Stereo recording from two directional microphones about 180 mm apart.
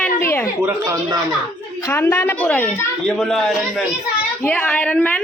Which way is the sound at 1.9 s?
10° left (ahead or behind).